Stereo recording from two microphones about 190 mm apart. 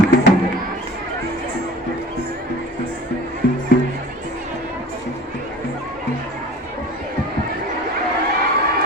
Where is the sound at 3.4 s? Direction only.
55° left (ahead or behind).